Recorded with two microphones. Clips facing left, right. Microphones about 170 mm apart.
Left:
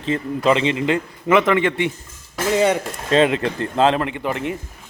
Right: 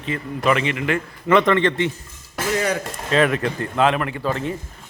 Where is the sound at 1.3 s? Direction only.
5° left (ahead or behind).